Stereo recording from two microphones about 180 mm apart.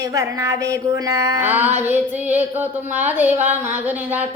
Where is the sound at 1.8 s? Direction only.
10° right (ahead or behind).